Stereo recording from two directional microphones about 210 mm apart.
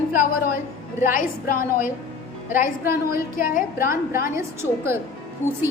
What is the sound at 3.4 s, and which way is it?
Speech, 45° left (ahead or behind).